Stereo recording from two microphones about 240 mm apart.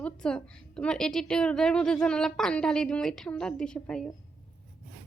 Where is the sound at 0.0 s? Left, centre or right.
Centre.